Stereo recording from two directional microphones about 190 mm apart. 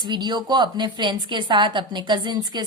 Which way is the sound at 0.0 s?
25° right (ahead or behind).